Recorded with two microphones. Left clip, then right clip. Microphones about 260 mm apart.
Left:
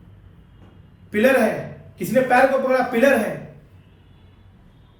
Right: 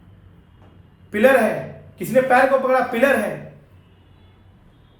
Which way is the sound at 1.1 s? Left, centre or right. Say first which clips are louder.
Right 2 dB; centre.